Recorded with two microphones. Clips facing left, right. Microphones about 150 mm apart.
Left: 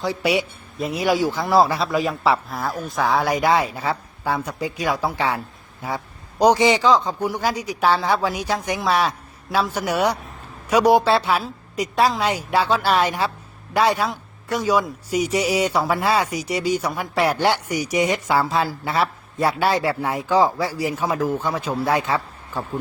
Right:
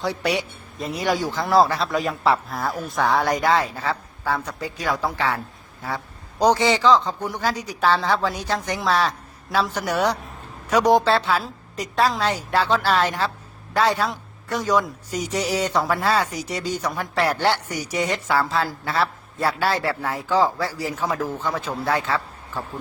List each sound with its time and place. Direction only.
0.0 s a man's voice: centre (ahead or behind)
6.4 s speech: 15° left (ahead or behind)